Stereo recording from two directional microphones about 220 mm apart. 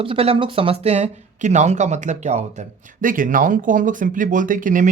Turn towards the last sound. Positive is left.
turn(degrees=-35)  # may be behind; listen again after turning